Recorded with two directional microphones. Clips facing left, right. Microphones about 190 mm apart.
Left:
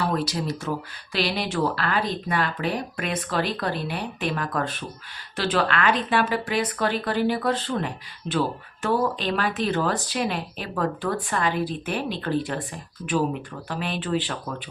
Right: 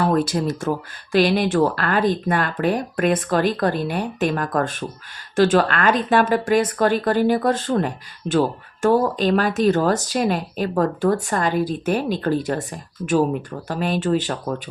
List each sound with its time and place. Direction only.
0.0 s speech: 50° right (ahead or behind)